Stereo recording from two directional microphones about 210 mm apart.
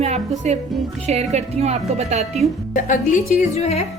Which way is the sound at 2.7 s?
40° left (ahead or behind).